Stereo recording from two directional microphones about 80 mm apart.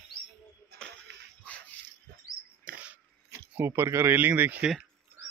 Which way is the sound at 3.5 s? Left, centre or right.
Right.